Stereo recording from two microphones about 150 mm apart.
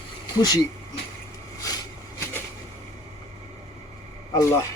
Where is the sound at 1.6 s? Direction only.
20° left (ahead or behind).